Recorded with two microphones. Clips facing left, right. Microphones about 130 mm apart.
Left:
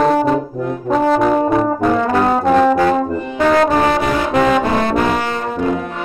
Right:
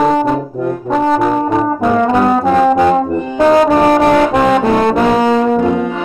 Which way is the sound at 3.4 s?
15° right (ahead or behind).